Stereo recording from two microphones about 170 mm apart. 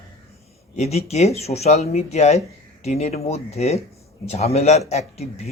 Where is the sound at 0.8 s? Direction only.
40° left (ahead or behind).